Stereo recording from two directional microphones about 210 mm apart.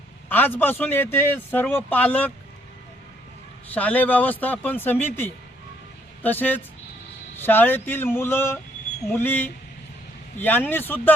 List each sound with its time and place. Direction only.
0.3 s speech: 10° left (ahead or behind)
3.8 s speech: 10° left (ahead or behind)